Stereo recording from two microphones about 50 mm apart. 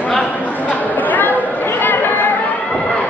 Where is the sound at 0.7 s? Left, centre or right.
Left.